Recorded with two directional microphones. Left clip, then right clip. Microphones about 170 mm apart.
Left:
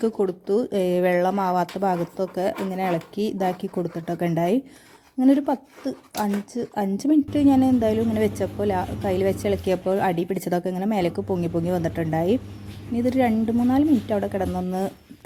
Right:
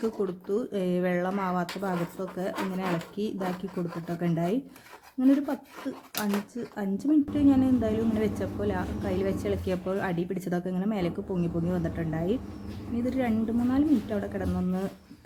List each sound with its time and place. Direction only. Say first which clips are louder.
0.0 s a woman's voice: left 7 dB; 35° left (ahead or behind)